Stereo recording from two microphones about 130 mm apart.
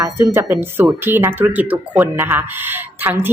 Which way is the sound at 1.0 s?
15° right (ahead or behind).